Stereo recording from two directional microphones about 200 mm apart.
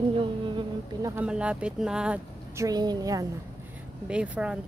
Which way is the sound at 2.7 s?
20° right (ahead or behind).